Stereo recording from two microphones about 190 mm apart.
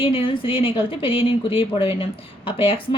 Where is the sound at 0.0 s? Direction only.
25° left (ahead or behind).